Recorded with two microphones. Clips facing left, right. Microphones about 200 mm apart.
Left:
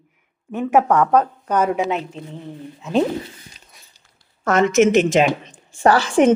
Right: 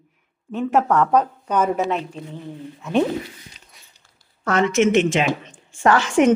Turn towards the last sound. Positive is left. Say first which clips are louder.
# left 2 dB
turn(degrees=35)  # may be behind; listen again after turning